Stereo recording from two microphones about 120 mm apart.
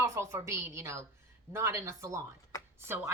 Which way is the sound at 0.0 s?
25° right (ahead or behind).